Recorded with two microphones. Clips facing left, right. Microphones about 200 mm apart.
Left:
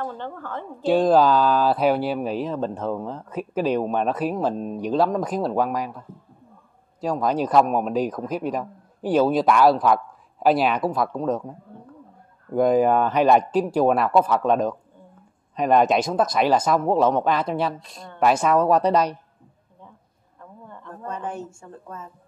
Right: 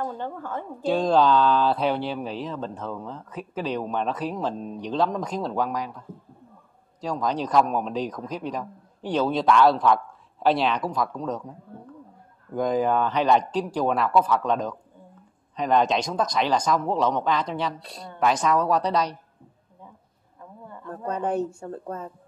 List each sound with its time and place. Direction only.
0.0 s a woman's voice: 15° right (ahead or behind)
0.8 s speech: 5° left (ahead or behind)
7.0 s speech: 10° left (ahead or behind)
7.5 s a man's voice: 20° left (ahead or behind)
7.9 s a man's voice: 5° left (ahead or behind)
12.5 s speech: 10° left (ahead or behind)
15.6 s speech: 10° left (ahead or behind)
20.9 s a woman's voice: 35° right (ahead or behind)